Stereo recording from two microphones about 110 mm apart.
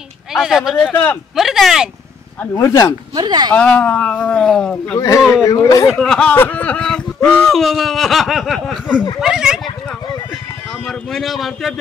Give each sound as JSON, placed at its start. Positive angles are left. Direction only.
{"t": 0.3, "sound": "speech", "side_deg": -5}
{"t": 2.5, "sound": "speech", "side_deg": 30}
{"t": 3.2, "sound": "speech", "side_deg": -40}
{"t": 3.5, "sound": "speech", "side_deg": 15}
{"t": 4.9, "sound": "speech", "side_deg": 30}
{"t": 5.9, "sound": "speech", "side_deg": 5}
{"t": 6.3, "sound": "speech", "side_deg": 15}
{"t": 10.9, "sound": "speech", "side_deg": 5}